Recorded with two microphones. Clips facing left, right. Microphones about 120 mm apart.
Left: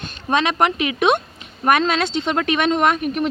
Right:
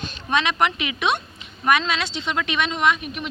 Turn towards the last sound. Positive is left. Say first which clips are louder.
# left 4 dB
turn(degrees=50)  # may be behind; listen again after turning